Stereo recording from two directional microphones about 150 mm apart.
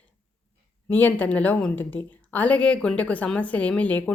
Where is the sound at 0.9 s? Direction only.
10° left (ahead or behind).